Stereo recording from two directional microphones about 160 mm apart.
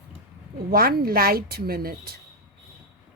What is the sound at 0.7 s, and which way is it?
A woman's voice, 70° right (ahead or behind).